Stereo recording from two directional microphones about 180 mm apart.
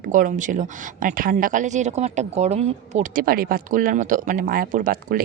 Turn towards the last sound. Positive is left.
turn(degrees=-50)  # may be behind; listen again after turning